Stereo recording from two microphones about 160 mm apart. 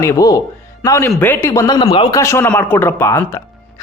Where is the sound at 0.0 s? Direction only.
20° left (ahead or behind).